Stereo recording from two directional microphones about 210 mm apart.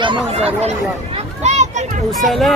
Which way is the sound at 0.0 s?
25° right (ahead or behind).